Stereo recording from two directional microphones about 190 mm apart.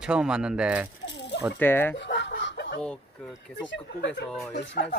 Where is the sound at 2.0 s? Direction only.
70° left (ahead or behind).